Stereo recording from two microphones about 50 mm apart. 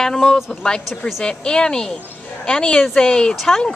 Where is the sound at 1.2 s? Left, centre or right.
Centre.